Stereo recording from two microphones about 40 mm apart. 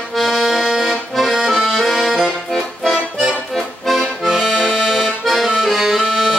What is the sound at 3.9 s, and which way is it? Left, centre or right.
Accordion, centre.